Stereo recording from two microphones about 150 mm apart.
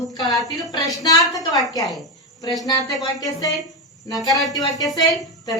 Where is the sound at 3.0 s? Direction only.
25° left (ahead or behind).